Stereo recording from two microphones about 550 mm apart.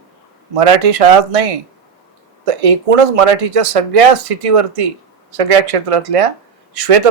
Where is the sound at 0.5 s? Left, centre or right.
Right.